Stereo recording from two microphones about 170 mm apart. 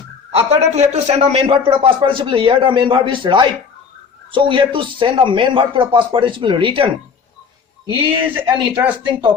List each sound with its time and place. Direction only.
0.3 s a man's voice: 40° right (ahead or behind)
8.0 s speech: 30° right (ahead or behind)
8.7 s speech: 10° right (ahead or behind)